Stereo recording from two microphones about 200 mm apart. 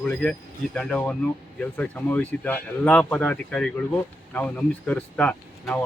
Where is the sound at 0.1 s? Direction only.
5° left (ahead or behind).